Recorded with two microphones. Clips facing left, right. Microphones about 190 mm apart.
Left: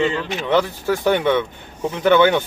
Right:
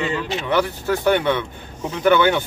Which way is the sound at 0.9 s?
15° left (ahead or behind).